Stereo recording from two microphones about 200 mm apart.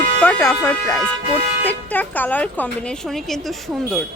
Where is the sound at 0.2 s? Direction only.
10° left (ahead or behind).